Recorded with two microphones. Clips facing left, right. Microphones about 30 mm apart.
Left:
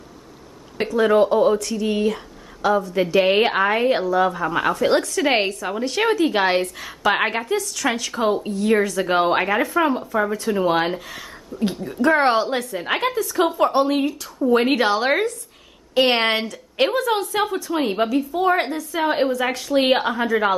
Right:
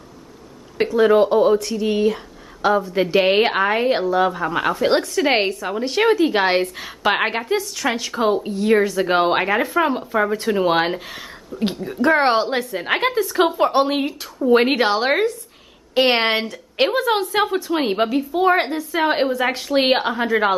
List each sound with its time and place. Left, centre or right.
0.7 s a woman's voice: centre
10.3 s a woman's voice: right; by 13.0 s centre
13.0 s a woman's voice: right